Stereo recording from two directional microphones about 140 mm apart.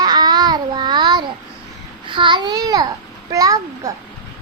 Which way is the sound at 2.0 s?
35° right (ahead or behind).